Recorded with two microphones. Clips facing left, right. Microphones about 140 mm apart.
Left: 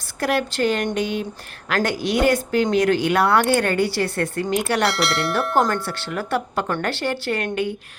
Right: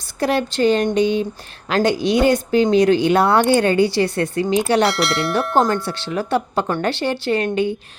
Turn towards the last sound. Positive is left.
turn(degrees=-25)  # may be behind; listen again after turning